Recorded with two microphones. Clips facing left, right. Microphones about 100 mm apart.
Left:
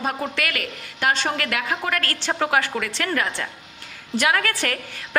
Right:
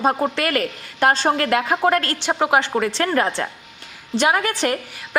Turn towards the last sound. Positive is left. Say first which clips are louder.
# right 3 dB
turn(degrees=-20)  # may be behind; listen again after turning